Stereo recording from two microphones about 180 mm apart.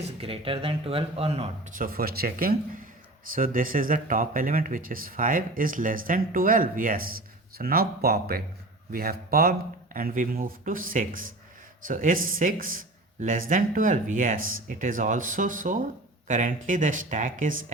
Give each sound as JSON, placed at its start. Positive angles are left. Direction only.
{"t": 0.0, "sound": "speech", "side_deg": -30}